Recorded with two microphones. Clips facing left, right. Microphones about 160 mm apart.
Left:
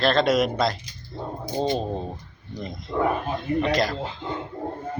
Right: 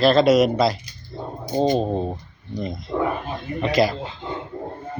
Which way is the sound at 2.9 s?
15° right (ahead or behind).